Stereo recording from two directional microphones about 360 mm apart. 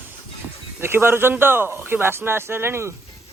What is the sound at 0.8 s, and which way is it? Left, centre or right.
Speech, centre.